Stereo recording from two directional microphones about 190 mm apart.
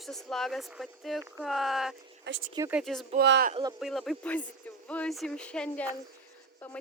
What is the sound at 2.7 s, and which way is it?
Speech, centre (ahead or behind).